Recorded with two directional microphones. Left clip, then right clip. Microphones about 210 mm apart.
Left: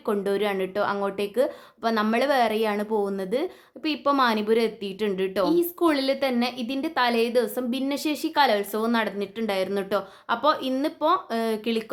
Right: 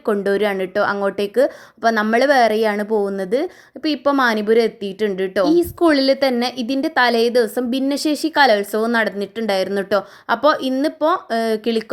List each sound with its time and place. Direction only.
0.0 s a woman's voice: 25° right (ahead or behind)